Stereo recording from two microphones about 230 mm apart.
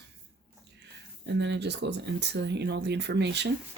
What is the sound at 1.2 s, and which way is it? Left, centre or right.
Speech, right.